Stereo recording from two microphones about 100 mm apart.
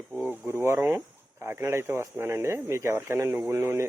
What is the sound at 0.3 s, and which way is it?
Speech, 25° right (ahead or behind).